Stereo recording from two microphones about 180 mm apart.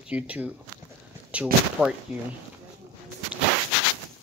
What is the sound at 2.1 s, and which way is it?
Speech, 35° left (ahead or behind).